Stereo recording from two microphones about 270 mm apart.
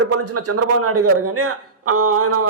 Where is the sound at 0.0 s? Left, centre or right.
Right.